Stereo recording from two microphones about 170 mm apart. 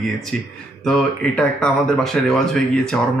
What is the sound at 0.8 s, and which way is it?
Speech, 5° left (ahead or behind).